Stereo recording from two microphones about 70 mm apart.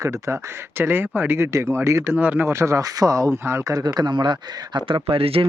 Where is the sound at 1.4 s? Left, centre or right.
Right.